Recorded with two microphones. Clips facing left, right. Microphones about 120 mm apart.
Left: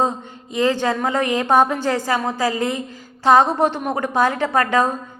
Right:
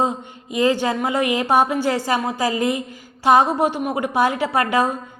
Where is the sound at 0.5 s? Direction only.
15° right (ahead or behind).